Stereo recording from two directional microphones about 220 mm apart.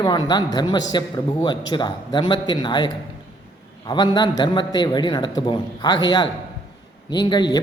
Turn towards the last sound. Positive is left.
turn(degrees=20)  # may be behind; listen again after turning